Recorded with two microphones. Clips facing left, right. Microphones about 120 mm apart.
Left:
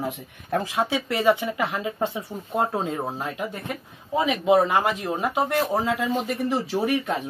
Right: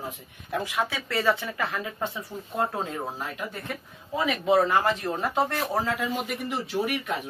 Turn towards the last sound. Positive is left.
turn(degrees=35)  # may be behind; listen again after turning